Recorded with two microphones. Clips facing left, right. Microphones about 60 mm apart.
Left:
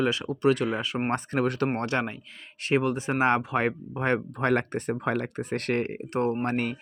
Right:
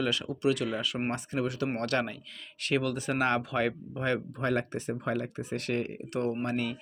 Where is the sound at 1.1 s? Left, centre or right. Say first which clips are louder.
Left 5 dB; left.